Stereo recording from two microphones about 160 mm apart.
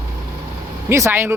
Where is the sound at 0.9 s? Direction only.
15° right (ahead or behind).